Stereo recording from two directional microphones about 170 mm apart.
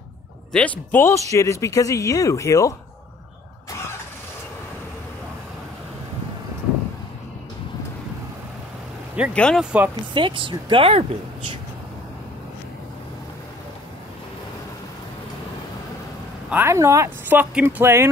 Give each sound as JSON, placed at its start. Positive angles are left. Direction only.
{"t": 0.5, "sound": "speech", "side_deg": 5}
{"t": 9.3, "sound": "speech", "side_deg": 5}
{"t": 9.6, "sound": "speech", "side_deg": -5}
{"t": 10.1, "sound": "speech", "side_deg": -30}
{"t": 16.4, "sound": "speech", "side_deg": -15}